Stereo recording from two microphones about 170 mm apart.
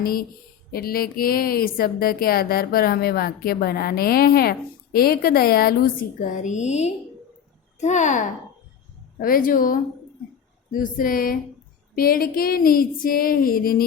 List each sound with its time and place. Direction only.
0.0 s speech: 60° left (ahead or behind)
6.2 s a woman's voice: 45° left (ahead or behind)
9.1 s speech: 55° left (ahead or behind)